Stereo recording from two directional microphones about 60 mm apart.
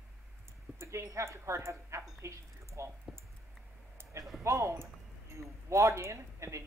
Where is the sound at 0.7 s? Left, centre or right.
Right.